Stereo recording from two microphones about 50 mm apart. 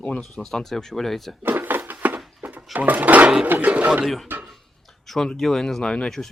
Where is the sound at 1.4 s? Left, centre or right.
Right.